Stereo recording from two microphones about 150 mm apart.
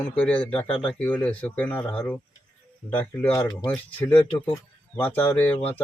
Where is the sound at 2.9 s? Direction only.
15° left (ahead or behind).